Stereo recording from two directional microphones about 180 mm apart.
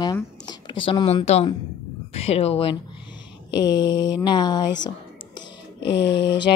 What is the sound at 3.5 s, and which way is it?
Speech, 25° left (ahead or behind).